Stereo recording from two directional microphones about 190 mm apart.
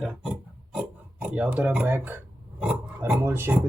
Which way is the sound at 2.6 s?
5° right (ahead or behind).